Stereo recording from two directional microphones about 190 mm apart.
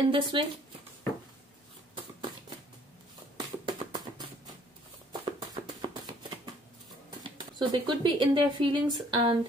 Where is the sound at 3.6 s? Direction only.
25° right (ahead or behind).